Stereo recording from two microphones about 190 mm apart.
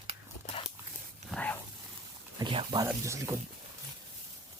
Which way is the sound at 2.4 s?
25° right (ahead or behind).